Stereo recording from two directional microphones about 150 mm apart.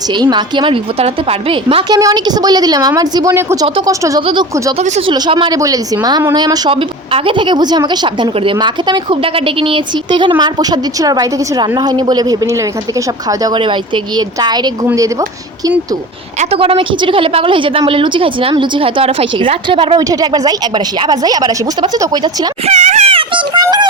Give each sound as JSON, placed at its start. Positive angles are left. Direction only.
{"t": 0.1, "sound": "a woman's voice", "side_deg": -30}
{"t": 1.9, "sound": "a woman's voice", "side_deg": -25}
{"t": 4.8, "sound": "speech", "side_deg": -50}
{"t": 5.0, "sound": "a woman's voice", "side_deg": -30}
{"t": 16.4, "sound": "a woman's voice", "side_deg": -40}
{"t": 22.6, "sound": "speech", "side_deg": -50}
{"t": 23.0, "sound": "a woman's voice", "side_deg": -35}